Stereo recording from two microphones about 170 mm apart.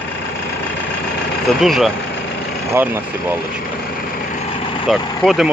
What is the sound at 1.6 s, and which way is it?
Speech, centre (ahead or behind).